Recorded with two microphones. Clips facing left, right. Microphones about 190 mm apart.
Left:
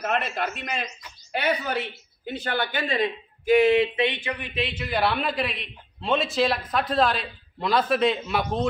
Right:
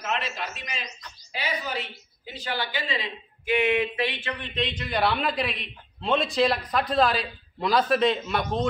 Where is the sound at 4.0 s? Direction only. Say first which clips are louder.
Left 3 dB; 20° left (ahead or behind).